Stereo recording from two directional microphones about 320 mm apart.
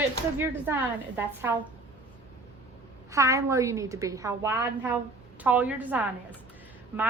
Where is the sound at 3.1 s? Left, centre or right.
Centre.